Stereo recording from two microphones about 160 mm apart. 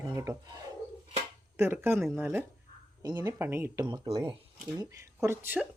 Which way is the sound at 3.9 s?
35° right (ahead or behind).